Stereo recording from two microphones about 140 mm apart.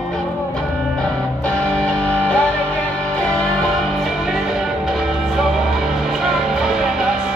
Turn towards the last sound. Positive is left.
turn(degrees=0)  # may be behind; listen again after turning